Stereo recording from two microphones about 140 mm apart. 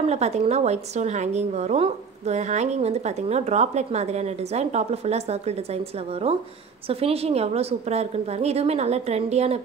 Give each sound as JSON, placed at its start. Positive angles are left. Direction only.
{"t": 0.1, "sound": "a woman's voice", "side_deg": -50}